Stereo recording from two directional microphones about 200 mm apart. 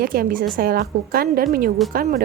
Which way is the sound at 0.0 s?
45° right (ahead or behind).